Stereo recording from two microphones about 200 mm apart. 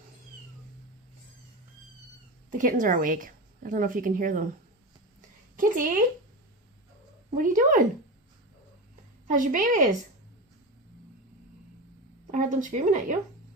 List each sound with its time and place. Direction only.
2.5 s a woman's voice: 40° right (ahead or behind)
5.5 s a woman's voice: 40° right (ahead or behind)
7.3 s speech: 40° right (ahead or behind)
9.2 s speech: 40° right (ahead or behind)
12.3 s speech: 40° right (ahead or behind)